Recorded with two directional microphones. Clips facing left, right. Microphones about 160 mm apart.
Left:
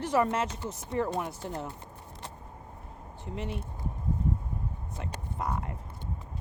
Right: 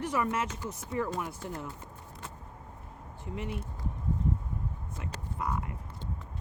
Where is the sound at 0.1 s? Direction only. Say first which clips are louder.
Left 8 dB; 35° left (ahead or behind).